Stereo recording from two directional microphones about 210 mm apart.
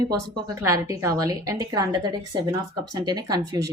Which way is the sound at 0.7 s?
15° right (ahead or behind).